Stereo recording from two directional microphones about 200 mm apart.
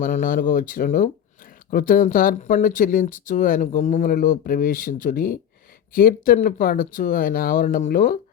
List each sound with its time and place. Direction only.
0.0 s speech: 40° left (ahead or behind)